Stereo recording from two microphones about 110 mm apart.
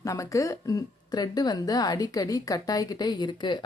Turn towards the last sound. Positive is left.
turn(degrees=40)  # may be behind; listen again after turning